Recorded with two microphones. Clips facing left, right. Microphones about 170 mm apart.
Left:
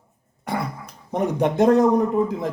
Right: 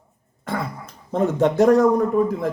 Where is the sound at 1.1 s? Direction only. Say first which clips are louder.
Right 2 dB; 15° left (ahead or behind).